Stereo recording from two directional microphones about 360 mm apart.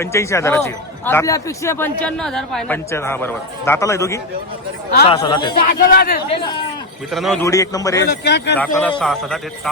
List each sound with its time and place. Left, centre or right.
0.0 s speech: centre
5.9 s speech: left
7.1 s speech: centre
8.0 s speech: left
8.5 s a man's voice: centre